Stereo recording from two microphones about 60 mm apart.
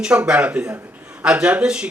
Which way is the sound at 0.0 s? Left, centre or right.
Centre.